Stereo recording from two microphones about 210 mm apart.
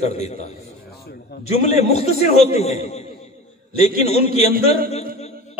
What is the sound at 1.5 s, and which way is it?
A man's voice, 30° left (ahead or behind).